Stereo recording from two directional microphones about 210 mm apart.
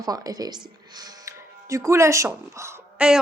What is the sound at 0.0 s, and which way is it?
Speech, 15° right (ahead or behind).